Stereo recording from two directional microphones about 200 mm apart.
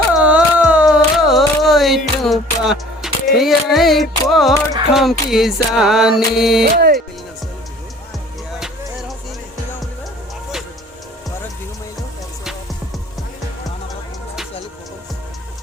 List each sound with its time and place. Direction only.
0.1 s music: 5° right (ahead or behind)
6.7 s speech: 50° right (ahead or behind)
8.5 s music: centre (ahead or behind)